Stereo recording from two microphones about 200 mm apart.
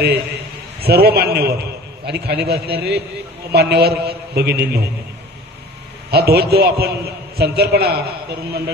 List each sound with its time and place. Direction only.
0.7 s a man's voice: 50° right (ahead or behind)
6.0 s a man's voice: 50° right (ahead or behind)